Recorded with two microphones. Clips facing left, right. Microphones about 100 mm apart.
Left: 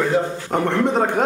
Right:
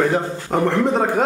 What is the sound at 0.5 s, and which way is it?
Speech, centre (ahead or behind).